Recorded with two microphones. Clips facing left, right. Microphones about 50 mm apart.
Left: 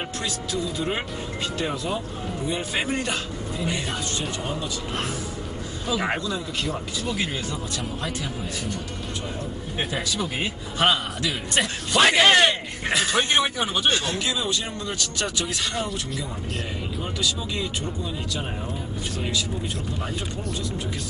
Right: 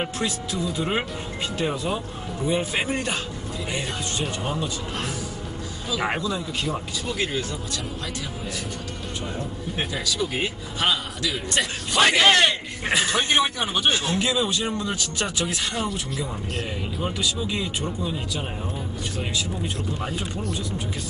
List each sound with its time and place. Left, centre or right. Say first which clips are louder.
0.0 s speech: right 3 dB; centre
1.6 s speech: right 3 dB; centre
6.0 s speech: right 4 dB; centre
9.9 s a man's voice: right 2 dB; left
11.9 s speech: left 1 dB; centre
13.9 s speech: right 2 dB; centre
15.7 s speech: right 1 dB; centre
17.0 s speech: right 2 dB; centre